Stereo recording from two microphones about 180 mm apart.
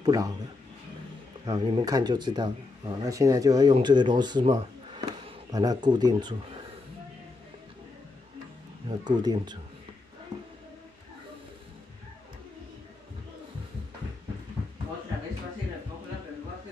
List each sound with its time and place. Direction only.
0.0 s speech: 20° right (ahead or behind)
1.4 s speech: 25° right (ahead or behind)
8.8 s speech: 25° right (ahead or behind)